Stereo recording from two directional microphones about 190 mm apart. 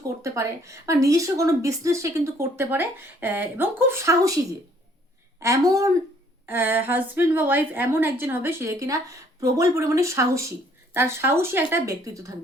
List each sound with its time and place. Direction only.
0.2 s speech: 15° right (ahead or behind)
5.4 s speech: 15° right (ahead or behind)